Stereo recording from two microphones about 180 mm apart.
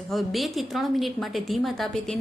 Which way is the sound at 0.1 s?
Centre (ahead or behind).